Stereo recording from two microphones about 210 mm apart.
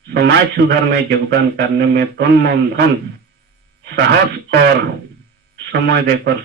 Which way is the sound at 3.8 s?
50° right (ahead or behind).